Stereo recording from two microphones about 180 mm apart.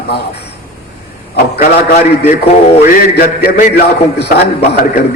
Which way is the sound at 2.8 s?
55° left (ahead or behind).